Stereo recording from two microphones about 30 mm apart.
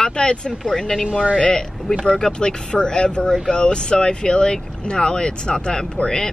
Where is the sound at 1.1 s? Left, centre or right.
Right.